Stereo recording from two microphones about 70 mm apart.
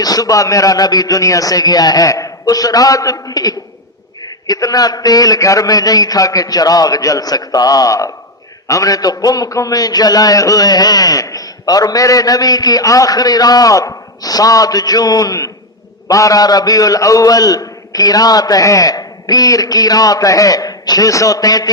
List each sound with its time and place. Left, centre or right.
0.0 s a man's voice: left
21.1 s a man's voice: left